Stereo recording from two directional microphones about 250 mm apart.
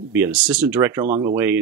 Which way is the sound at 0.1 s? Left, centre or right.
Centre.